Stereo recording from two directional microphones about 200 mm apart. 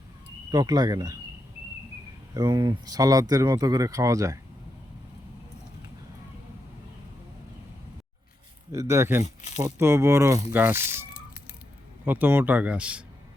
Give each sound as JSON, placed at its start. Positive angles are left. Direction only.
{"t": 0.5, "sound": "speech", "side_deg": -20}
{"t": 2.3, "sound": "speech", "side_deg": -20}
{"t": 8.7, "sound": "speech", "side_deg": -15}
{"t": 12.0, "sound": "speech", "side_deg": -10}